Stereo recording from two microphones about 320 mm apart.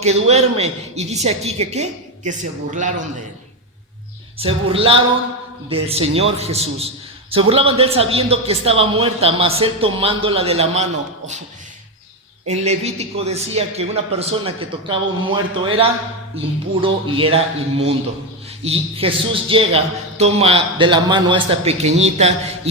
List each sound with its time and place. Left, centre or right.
0.0 s speech: centre
4.4 s a man's voice: centre
12.5 s a man's voice: centre